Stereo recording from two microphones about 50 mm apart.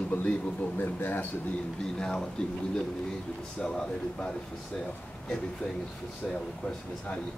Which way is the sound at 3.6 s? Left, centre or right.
Centre.